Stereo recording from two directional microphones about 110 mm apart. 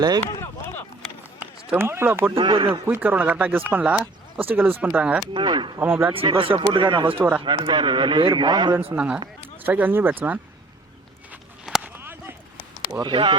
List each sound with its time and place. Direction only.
0.3 s a sound: 20° left (ahead or behind)
1.7 s speech: 20° right (ahead or behind)
2.3 s a man's voice: 50° right (ahead or behind)
2.8 s speech: 15° right (ahead or behind)
5.3 s a man's voice: 45° right (ahead or behind)
5.8 s speech: 20° right (ahead or behind)
6.1 s a man's voice: 55° right (ahead or behind)
7.2 s speech: 15° right (ahead or behind)
7.4 s a man's voice: 45° right (ahead or behind)
9.0 s speech: 10° right (ahead or behind)
11.8 s a sound: 20° right (ahead or behind)
13.0 s a man's voice: 45° right (ahead or behind)